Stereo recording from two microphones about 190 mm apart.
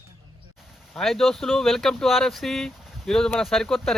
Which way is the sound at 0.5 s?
Centre (ahead or behind).